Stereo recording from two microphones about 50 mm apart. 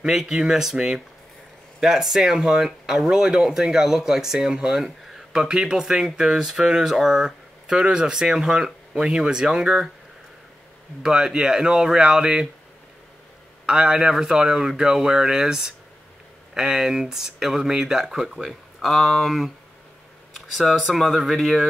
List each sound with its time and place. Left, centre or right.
0.0 s speech: centre
4.7 s a sound: centre
5.4 s speech: centre
11.0 s speech: centre
13.7 s speech: centre